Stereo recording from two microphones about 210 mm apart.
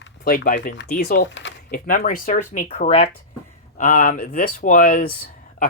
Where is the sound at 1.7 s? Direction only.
40° left (ahead or behind).